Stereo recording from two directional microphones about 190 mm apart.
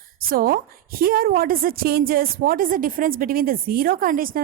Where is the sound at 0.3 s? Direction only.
50° right (ahead or behind).